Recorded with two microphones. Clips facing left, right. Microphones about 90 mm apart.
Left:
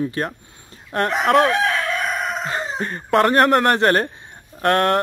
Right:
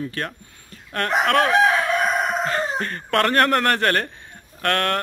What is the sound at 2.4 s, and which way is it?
Speech, 15° left (ahead or behind).